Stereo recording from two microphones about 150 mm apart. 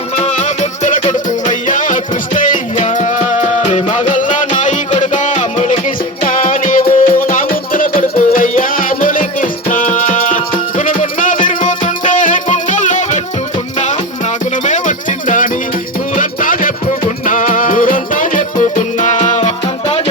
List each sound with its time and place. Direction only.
0.2 s music: 50° left (ahead or behind)
6.2 s music: 65° left (ahead or behind)
14.6 s music: 55° left (ahead or behind)